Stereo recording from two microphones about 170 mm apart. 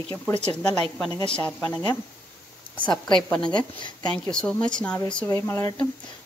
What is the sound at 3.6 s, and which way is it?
Speech, 25° left (ahead or behind).